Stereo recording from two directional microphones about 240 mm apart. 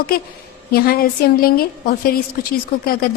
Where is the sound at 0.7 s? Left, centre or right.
Left.